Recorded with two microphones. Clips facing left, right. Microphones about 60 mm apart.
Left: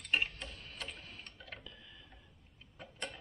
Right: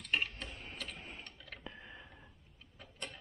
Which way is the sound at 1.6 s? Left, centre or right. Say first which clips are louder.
Right 5 dB; right.